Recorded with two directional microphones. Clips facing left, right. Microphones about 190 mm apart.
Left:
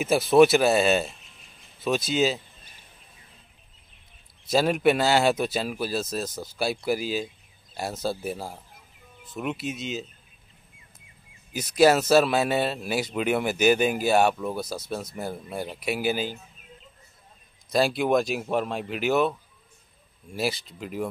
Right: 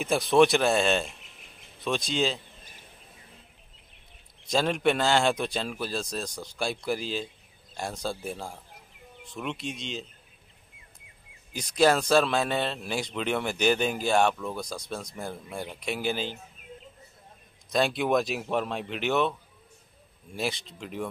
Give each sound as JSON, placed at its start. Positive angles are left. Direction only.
{"t": 0.0, "sound": "speech", "side_deg": 5}
{"t": 4.5, "sound": "a man's voice", "side_deg": 5}
{"t": 11.5, "sound": "a man's voice", "side_deg": 5}
{"t": 17.6, "sound": "speech", "side_deg": 0}
{"t": 20.3, "sound": "speech", "side_deg": 5}